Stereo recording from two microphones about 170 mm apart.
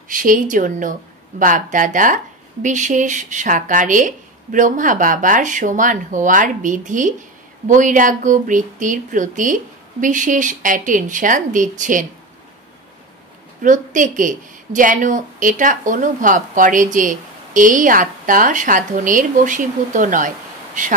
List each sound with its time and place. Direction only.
0.1 s a woman's voice: 50° right (ahead or behind)
13.6 s a woman's voice: 50° right (ahead or behind)